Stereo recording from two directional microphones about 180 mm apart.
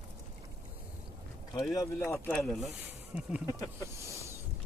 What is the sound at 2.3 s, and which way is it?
Speech, 5° left (ahead or behind).